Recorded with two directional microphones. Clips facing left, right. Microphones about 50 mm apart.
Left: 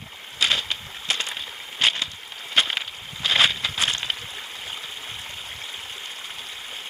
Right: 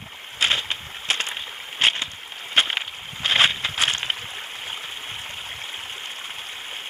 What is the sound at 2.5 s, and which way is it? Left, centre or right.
Boat, centre.